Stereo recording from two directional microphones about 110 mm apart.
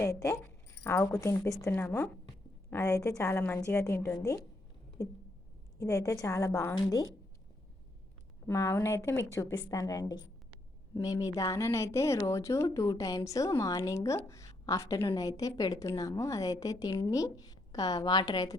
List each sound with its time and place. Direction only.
0.0 s a woman's voice: 25° left (ahead or behind)
8.4 s a woman's voice: 25° left (ahead or behind)